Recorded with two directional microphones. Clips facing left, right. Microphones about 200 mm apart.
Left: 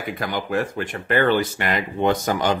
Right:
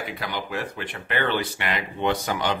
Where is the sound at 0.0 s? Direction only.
45° left (ahead or behind).